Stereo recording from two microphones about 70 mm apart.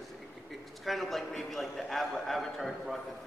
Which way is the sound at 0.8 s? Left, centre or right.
Centre.